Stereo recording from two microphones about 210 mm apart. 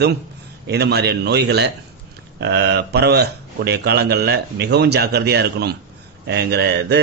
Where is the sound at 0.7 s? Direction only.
50° right (ahead or behind).